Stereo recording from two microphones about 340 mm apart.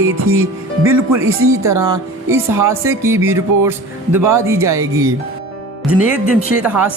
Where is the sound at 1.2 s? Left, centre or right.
Right.